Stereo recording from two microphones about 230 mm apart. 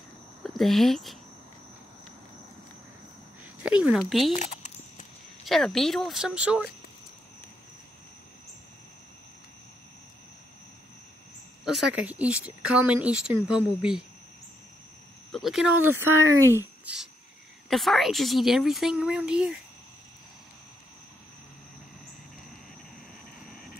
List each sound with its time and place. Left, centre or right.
0.4 s speech: centre
3.6 s a woman's voice: centre
4.3 s a sound: left
5.4 s a woman's voice: centre
11.6 s a woman's voice: centre
15.3 s a woman's voice: centre